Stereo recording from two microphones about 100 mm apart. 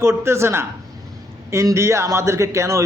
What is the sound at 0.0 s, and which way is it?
A man's voice, 25° right (ahead or behind).